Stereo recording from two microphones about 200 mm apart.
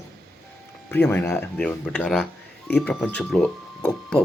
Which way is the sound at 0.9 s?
10° left (ahead or behind).